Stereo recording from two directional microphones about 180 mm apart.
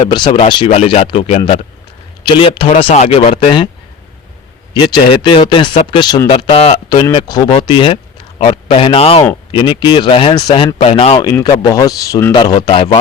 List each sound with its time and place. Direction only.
0.4 s speech: 25° left (ahead or behind)
4.8 s speech: 25° left (ahead or behind)
11.2 s speech: 20° left (ahead or behind)